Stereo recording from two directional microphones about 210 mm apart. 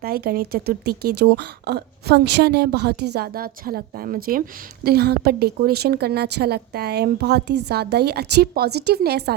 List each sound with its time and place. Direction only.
0.0 s speech: 45° right (ahead or behind)